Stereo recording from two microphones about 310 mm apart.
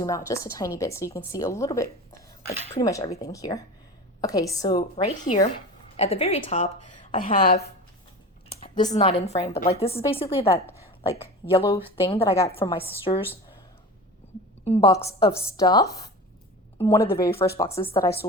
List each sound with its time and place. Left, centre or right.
0.3 s a woman's voice: centre
4.7 s a woman's voice: left
8.6 s a woman's voice: centre
14.6 s a woman's voice: centre